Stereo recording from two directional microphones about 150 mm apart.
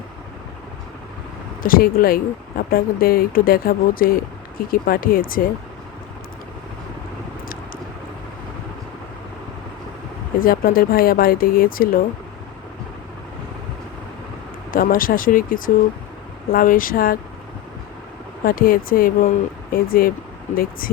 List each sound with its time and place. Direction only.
1.6 s speech: 70° left (ahead or behind)
10.4 s speech: 75° left (ahead or behind)
14.7 s speech: 70° left (ahead or behind)
18.4 s speech: 70° left (ahead or behind)